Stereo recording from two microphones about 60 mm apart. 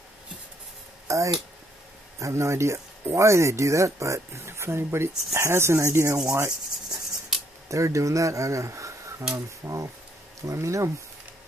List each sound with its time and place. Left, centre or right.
1.0 s a sound: right
2.1 s speech: right
6.9 s rub: centre
7.6 s speech: right